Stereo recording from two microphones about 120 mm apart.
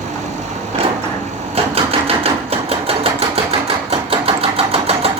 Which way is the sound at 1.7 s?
55° right (ahead or behind).